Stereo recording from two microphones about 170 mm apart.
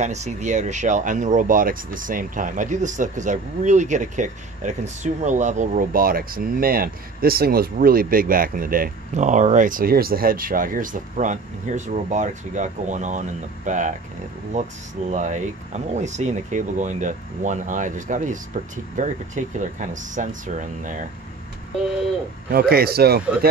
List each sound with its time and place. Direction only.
0.0 s speech: 40° right (ahead or behind)
22.5 s a man's voice: 60° right (ahead or behind)